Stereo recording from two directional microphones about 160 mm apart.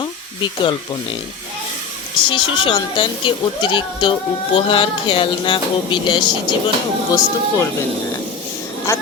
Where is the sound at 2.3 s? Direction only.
30° left (ahead or behind).